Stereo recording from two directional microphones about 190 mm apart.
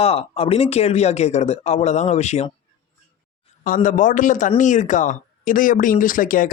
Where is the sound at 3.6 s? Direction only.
45° left (ahead or behind).